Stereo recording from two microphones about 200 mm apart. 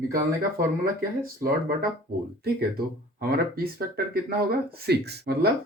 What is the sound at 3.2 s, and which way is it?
Speech, 50° right (ahead or behind).